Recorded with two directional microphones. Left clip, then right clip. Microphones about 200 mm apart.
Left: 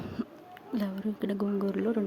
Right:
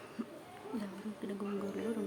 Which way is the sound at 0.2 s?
25° left (ahead or behind).